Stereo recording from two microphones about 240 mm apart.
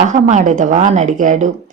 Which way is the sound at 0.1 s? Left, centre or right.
Right.